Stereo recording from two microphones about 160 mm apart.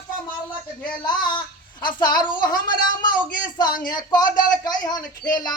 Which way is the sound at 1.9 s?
25° left (ahead or behind).